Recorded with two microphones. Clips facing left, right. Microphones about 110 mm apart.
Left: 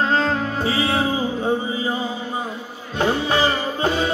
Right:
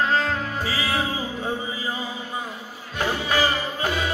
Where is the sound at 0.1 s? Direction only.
30° left (ahead or behind).